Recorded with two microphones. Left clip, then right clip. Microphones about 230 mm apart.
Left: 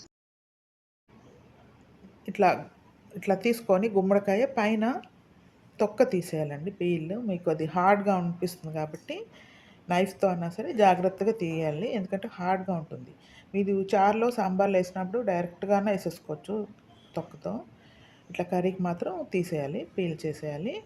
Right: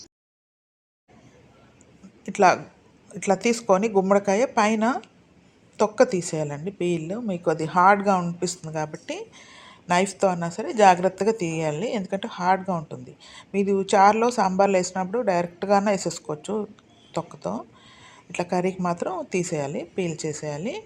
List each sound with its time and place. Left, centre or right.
2.2 s a woman's voice: centre